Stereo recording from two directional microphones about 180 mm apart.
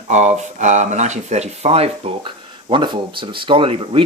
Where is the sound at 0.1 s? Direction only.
40° right (ahead or behind).